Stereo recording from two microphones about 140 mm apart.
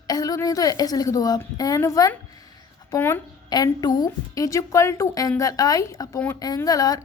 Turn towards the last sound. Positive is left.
turn(degrees=25)  # may be behind; listen again after turning